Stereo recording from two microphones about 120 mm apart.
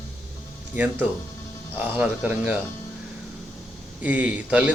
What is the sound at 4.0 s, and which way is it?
Speech, 10° right (ahead or behind).